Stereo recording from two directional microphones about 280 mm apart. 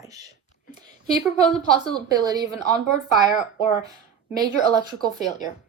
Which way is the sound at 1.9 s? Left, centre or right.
Centre.